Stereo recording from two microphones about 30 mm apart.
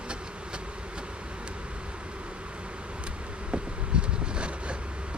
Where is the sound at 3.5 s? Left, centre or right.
Right.